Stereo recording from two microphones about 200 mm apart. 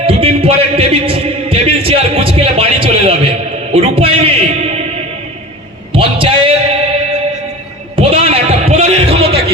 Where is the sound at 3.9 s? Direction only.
30° right (ahead or behind).